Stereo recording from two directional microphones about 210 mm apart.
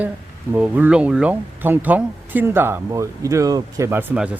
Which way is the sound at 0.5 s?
10° right (ahead or behind).